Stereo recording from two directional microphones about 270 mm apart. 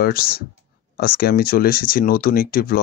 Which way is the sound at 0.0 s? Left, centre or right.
Left.